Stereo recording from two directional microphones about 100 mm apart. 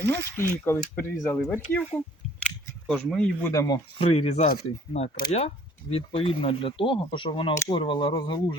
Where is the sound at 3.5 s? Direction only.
35° left (ahead or behind).